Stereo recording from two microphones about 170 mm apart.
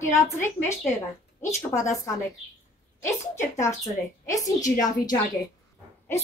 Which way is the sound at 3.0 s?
15° left (ahead or behind).